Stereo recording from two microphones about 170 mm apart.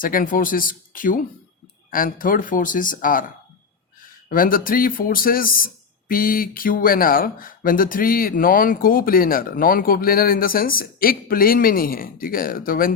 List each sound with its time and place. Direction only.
0.0 s speech: 55° left (ahead or behind)
4.3 s speech: 55° left (ahead or behind)